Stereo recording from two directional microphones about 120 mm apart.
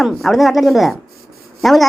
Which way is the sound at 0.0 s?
Centre (ahead or behind).